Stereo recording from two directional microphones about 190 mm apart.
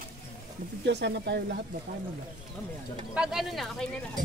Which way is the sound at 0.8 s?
65° right (ahead or behind).